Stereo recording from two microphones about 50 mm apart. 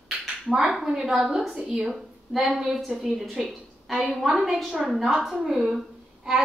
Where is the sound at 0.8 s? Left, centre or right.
Centre.